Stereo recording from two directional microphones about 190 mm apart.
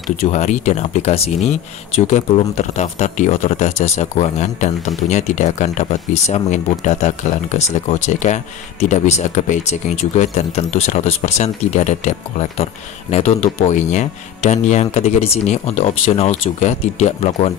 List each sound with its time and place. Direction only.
0.2 s speech: 35° left (ahead or behind)